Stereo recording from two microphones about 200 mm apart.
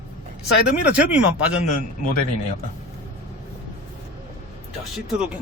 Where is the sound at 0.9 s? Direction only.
5° right (ahead or behind).